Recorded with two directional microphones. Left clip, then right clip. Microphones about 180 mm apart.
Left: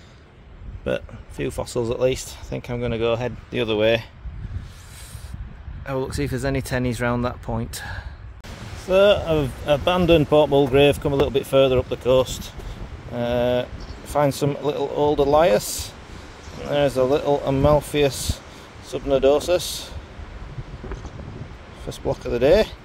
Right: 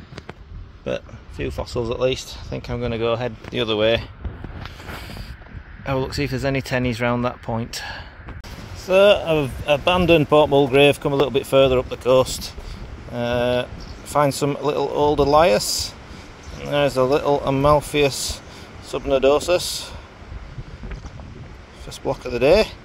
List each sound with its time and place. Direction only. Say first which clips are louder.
0.8 s speech: left 1 dB; 20° left (ahead or behind)
5.9 s speech: right 2 dB; 5° left (ahead or behind)
21.8 s speech: even; centre (ahead or behind)